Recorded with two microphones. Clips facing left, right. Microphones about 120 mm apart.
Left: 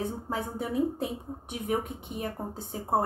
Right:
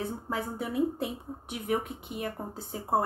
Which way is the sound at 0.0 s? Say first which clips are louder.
Left 1 dB; 35° left (ahead or behind).